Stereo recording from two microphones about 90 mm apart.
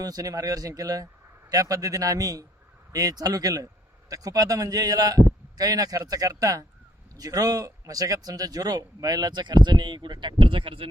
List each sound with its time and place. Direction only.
0.0 s a man's voice: 45° right (ahead or behind); by 10.8 s 70° right (ahead or behind)